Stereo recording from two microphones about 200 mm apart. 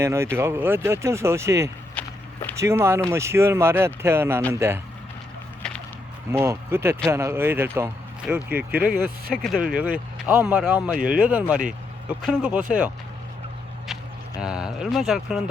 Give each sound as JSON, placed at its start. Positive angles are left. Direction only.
{"t": 0.0, "sound": "speech", "side_deg": -15}
{"t": 2.0, "sound": "walk", "side_deg": 10}
{"t": 2.6, "sound": "speech", "side_deg": -15}
{"t": 5.6, "sound": "walk", "side_deg": 5}
{"t": 6.3, "sound": "speech", "side_deg": -10}
{"t": 8.9, "sound": "speech", "side_deg": -50}
{"t": 9.4, "sound": "speech", "side_deg": 0}
{"t": 14.4, "sound": "speech", "side_deg": -5}